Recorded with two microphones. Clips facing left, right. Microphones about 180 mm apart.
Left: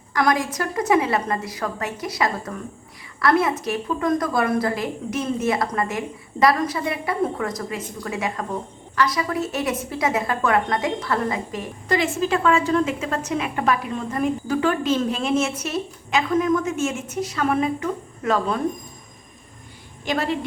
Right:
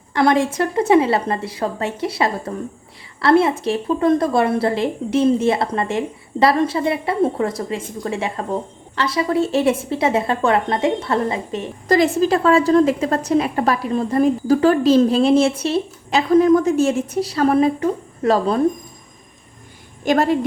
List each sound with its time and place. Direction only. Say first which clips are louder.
0.1 s a woman's voice: right 5 dB; 30° right (ahead or behind)
11.9 s a woman's voice: right 6 dB; 40° right (ahead or behind)
20.1 s a woman's voice: right 8 dB; 45° right (ahead or behind)